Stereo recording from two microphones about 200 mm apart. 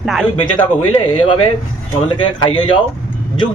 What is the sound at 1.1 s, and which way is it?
Speech, 25° left (ahead or behind).